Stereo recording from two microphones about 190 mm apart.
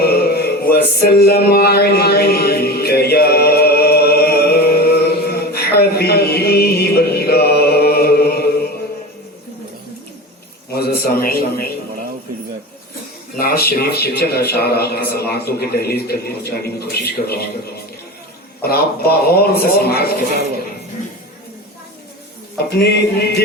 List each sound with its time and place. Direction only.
0.0 s music: 55° left (ahead or behind)
10.8 s a sound: 55° left (ahead or behind)
13.4 s a man's voice: 50° left (ahead or behind)
18.6 s speech: 55° left (ahead or behind)
22.5 s a man's voice: 60° left (ahead or behind)